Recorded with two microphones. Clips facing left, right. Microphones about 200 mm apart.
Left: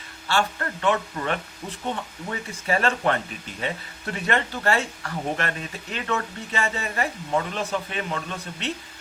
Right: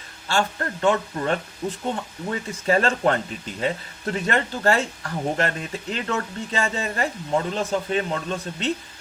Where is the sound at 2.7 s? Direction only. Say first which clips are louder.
Right 3 dB; 35° right (ahead or behind).